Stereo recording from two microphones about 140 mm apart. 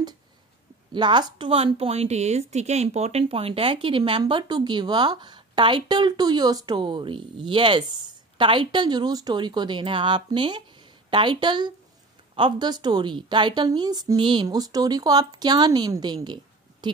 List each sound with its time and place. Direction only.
0.9 s speech: 35° right (ahead or behind)
1.5 s speech: 45° right (ahead or behind)